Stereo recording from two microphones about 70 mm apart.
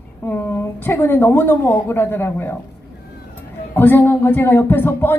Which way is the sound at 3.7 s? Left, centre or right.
Left.